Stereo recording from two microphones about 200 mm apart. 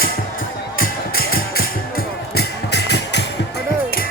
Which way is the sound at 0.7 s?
50° left (ahead or behind).